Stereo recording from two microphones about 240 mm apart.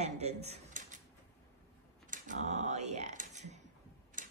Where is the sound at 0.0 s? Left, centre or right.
Right.